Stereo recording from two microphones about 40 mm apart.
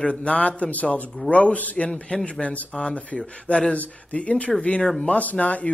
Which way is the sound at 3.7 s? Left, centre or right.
Left.